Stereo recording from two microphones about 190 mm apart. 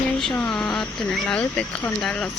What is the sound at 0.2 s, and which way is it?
Speech, 5° left (ahead or behind).